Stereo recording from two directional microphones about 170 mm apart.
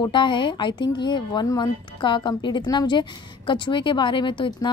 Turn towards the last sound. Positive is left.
turn(degrees=30)  # may be behind; listen again after turning